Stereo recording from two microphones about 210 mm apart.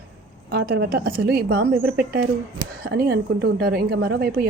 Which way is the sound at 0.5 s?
45° right (ahead or behind).